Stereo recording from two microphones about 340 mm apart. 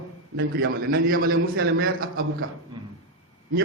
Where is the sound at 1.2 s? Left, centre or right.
Right.